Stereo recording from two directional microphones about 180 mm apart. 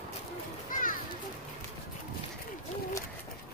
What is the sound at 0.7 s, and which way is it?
Children playing, 50° left (ahead or behind).